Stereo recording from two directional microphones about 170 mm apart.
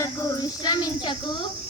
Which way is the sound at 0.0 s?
20° left (ahead or behind).